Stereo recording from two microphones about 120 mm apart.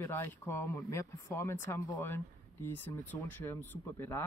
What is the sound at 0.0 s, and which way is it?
Speech, 20° left (ahead or behind).